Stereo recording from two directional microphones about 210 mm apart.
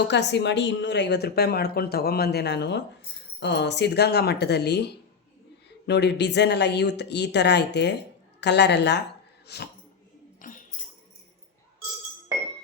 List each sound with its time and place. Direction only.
0.1 s speech: 55° left (ahead or behind)
10.4 s tambourine: 40° left (ahead or behind)